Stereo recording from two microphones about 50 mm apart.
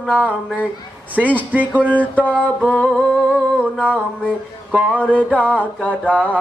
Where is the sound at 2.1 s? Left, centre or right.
Right.